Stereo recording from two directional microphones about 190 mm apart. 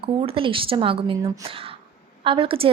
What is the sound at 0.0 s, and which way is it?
Speech, 30° right (ahead or behind).